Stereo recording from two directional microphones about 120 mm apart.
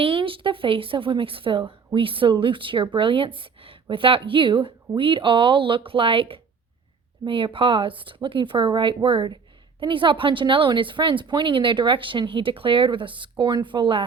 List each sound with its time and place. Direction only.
0.0 s a woman's voice: 45° right (ahead or behind)